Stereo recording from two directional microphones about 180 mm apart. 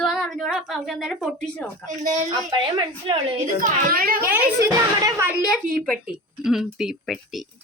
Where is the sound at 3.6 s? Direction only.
55° right (ahead or behind).